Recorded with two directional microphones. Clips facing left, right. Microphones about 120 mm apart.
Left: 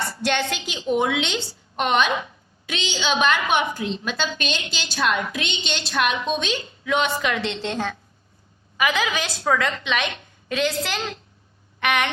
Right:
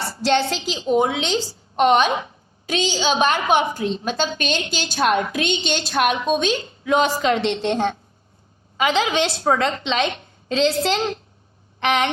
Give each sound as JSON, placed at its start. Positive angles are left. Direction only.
{"t": 0.0, "sound": "a woman's voice", "side_deg": -30}